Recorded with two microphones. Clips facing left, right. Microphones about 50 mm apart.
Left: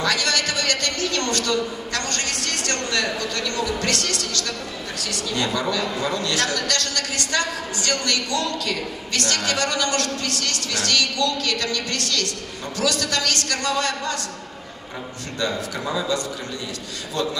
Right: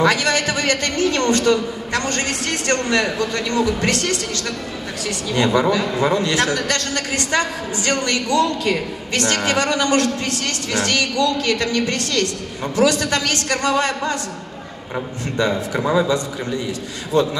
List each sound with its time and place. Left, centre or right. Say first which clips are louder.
0.0 s a woman's voice: right 5 dB; right
15.3 s a woman's voice: right 6 dB; right